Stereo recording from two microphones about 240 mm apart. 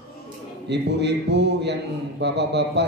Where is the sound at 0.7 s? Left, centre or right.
Right.